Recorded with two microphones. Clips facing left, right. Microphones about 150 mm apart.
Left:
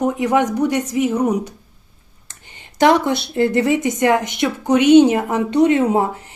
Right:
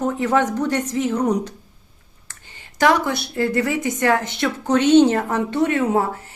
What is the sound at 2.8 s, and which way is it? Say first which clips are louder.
A woman's voice: left 4 dB; 20° left (ahead or behind).